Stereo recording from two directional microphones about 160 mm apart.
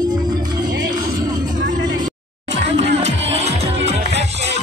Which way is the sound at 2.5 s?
45° right (ahead or behind).